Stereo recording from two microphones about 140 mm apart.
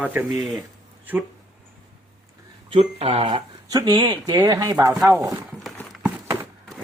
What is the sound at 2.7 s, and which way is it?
Speech, 40° right (ahead or behind).